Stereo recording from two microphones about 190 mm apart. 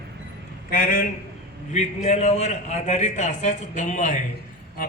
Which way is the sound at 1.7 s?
35° left (ahead or behind).